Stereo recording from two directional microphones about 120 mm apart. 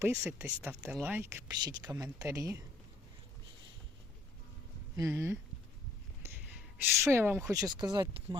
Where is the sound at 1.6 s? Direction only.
35° right (ahead or behind).